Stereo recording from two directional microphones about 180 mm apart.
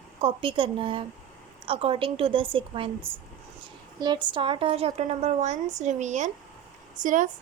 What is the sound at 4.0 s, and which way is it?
A woman's voice, 25° right (ahead or behind).